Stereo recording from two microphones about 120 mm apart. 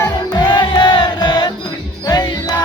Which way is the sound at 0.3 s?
40° left (ahead or behind).